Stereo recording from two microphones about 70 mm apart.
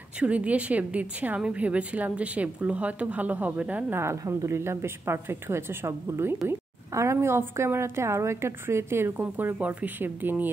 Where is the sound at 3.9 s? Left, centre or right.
Right.